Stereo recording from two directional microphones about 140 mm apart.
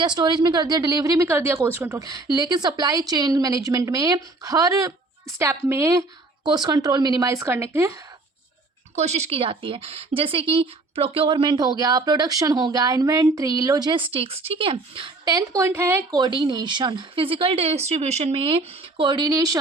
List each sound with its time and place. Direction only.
0.0 s speech: 30° right (ahead or behind)
9.0 s speech: 50° right (ahead or behind); by 16.0 s 15° right (ahead or behind)
16.1 s speech: 30° right (ahead or behind)